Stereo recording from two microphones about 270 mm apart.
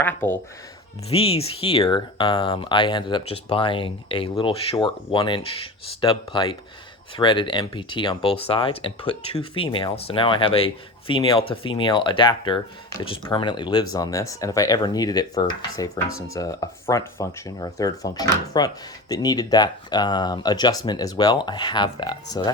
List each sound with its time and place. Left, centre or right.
0.0 s speech: centre
1.1 s speech: left